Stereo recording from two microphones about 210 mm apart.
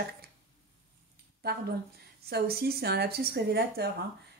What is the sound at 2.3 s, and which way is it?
A woman's voice, 50° right (ahead or behind).